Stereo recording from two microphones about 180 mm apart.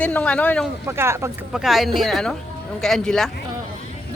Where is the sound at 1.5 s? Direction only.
Centre (ahead or behind).